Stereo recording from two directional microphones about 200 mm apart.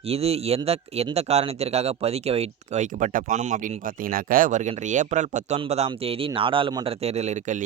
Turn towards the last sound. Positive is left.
turn(degrees=-35)  # may be behind; listen again after turning